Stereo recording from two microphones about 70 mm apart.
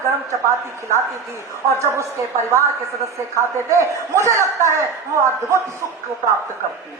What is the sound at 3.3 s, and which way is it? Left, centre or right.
Speech, right.